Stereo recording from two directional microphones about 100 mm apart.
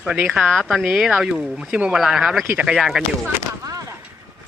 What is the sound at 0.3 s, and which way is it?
Speech, centre (ahead or behind).